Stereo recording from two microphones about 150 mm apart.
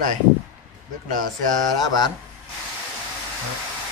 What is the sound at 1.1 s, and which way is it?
A man's voice, 30° left (ahead or behind).